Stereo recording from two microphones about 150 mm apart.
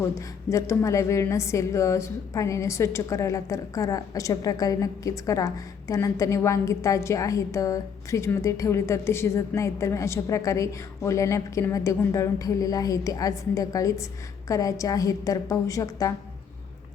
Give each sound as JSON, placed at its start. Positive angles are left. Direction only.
{"t": 0.0, "sound": "a woman's voice", "side_deg": 20}